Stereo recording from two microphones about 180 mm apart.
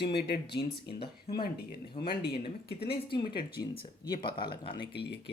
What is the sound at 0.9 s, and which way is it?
Speech, 30° left (ahead or behind).